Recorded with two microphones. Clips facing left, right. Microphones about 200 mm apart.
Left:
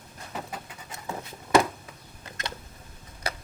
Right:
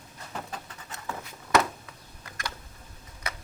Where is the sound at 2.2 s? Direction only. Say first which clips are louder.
Left 1 dB; 25° left (ahead or behind).